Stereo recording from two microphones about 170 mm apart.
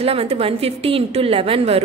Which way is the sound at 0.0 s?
35° right (ahead or behind).